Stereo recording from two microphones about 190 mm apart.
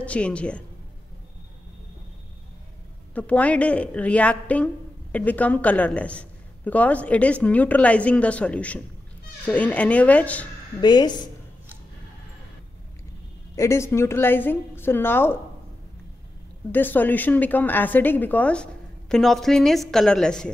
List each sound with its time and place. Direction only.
0.0 s a woman's voice: 5° left (ahead or behind)
3.2 s a woman's voice: 5° left (ahead or behind)
10.8 s a woman's voice: 20° left (ahead or behind)
13.6 s a woman's voice: 15° left (ahead or behind)
16.7 s a woman's voice: 10° left (ahead or behind)